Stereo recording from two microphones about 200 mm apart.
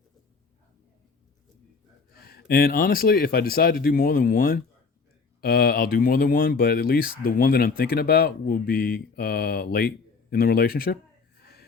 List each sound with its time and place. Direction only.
2.1 s speech: 50° left (ahead or behind)